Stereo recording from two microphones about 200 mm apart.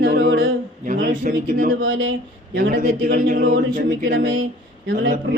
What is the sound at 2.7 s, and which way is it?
Mantra, 45° right (ahead or behind).